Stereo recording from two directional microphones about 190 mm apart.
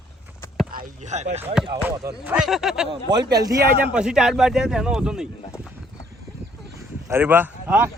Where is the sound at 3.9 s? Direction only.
5° right (ahead or behind).